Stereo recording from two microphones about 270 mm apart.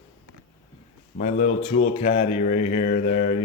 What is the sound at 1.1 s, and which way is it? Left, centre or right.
Speech, left.